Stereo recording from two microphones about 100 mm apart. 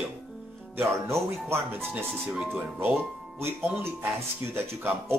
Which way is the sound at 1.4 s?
20° right (ahead or behind).